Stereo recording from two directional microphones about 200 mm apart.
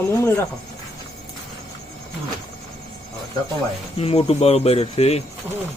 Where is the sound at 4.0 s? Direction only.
30° left (ahead or behind).